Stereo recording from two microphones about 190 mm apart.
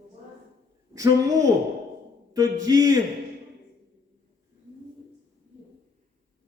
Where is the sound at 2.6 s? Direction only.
20° right (ahead or behind).